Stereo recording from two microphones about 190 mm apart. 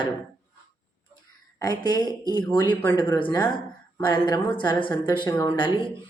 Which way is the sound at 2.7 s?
10° left (ahead or behind).